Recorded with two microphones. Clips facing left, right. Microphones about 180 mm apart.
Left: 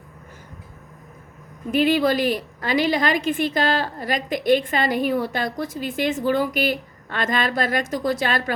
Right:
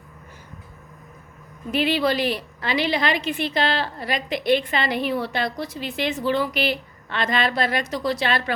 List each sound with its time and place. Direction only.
1.7 s a woman's voice: 45° left (ahead or behind)